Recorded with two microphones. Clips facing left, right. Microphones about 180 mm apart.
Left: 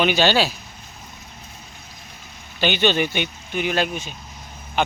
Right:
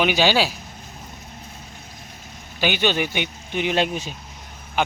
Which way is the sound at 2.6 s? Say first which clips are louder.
Left 2 dB; 10° right (ahead or behind).